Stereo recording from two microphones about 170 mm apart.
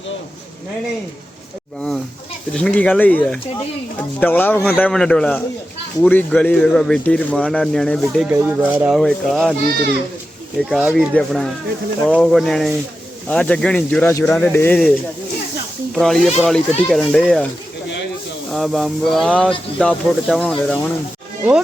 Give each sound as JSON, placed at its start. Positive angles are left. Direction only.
{"t": 2.5, "sound": "speech", "side_deg": 5}
{"t": 8.3, "sound": "speech", "side_deg": -10}
{"t": 9.0, "sound": "speech", "side_deg": 0}
{"t": 10.7, "sound": "speech", "side_deg": 0}
{"t": 14.1, "sound": "speech", "side_deg": 15}
{"t": 16.0, "sound": "speech", "side_deg": 0}
{"t": 18.5, "sound": "speech", "side_deg": 0}